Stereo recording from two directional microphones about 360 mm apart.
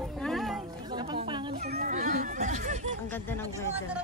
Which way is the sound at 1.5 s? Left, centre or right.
Right.